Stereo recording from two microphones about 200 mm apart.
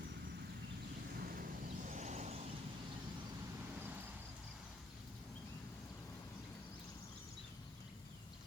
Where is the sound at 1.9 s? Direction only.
35° right (ahead or behind).